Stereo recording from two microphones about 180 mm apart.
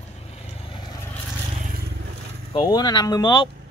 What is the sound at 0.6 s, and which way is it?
Vehicle, 25° left (ahead or behind).